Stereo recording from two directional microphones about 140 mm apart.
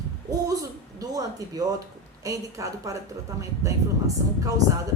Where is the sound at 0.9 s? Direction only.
25° right (ahead or behind).